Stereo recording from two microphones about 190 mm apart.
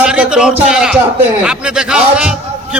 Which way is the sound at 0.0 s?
5° right (ahead or behind).